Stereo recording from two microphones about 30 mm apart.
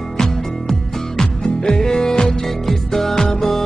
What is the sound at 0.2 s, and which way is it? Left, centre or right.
Music, centre.